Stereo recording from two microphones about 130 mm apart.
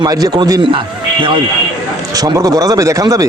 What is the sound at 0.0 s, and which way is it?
Speech, 30° right (ahead or behind).